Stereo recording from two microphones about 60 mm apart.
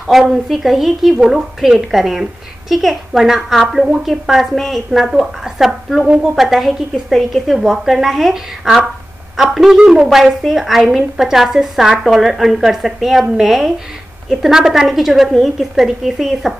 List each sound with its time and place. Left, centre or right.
0.0 s a woman's voice: centre
6.0 s speech: centre
6.3 s a woman's voice: centre